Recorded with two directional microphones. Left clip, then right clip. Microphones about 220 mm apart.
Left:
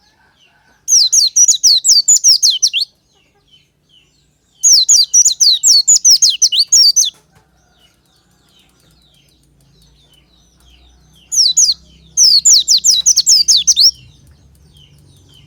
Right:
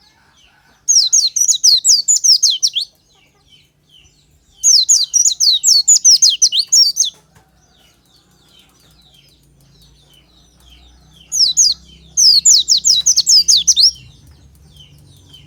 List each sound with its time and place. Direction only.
0.9 s bird: 20° left (ahead or behind)
4.6 s bird: 20° left (ahead or behind)
5.9 s chirp: 15° left (ahead or behind)
11.3 s bird: 20° left (ahead or behind)
13.4 s chirp: 20° left (ahead or behind)